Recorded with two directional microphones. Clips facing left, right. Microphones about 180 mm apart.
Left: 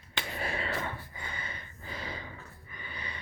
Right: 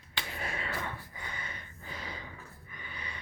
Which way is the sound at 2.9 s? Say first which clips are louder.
Left 2 dB; 30° left (ahead or behind).